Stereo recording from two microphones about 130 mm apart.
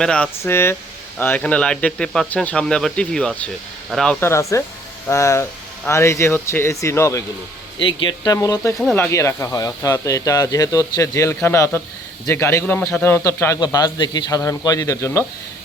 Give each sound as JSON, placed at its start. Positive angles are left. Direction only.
{"t": 0.0, "sound": "speech", "side_deg": 5}
{"t": 0.4, "sound": "speech", "side_deg": 20}
{"t": 4.2, "sound": "speech", "side_deg": 20}
{"t": 7.8, "sound": "speech", "side_deg": 40}
{"t": 13.7, "sound": "speech", "side_deg": 30}